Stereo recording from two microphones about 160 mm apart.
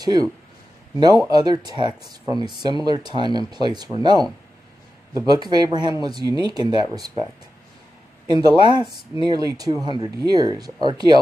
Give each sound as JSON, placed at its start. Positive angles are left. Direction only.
{"t": 0.0, "sound": "speech", "side_deg": -25}
{"t": 8.3, "sound": "speech", "side_deg": -25}